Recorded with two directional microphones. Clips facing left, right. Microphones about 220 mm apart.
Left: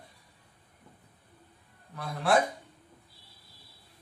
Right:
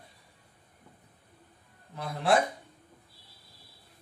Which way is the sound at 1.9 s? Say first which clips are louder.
Right 2 dB; 25° right (ahead or behind).